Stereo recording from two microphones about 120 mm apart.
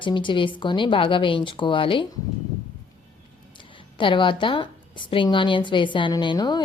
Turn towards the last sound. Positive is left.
turn(degrees=35)  # may be behind; listen again after turning